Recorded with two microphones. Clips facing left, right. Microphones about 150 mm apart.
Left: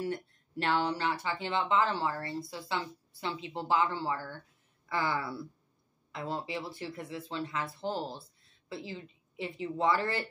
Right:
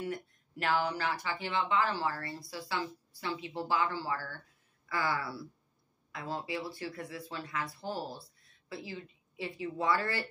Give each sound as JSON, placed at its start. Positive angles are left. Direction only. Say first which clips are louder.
{"t": 0.0, "sound": "a woman's voice", "louder": "left 3 dB", "side_deg": 30}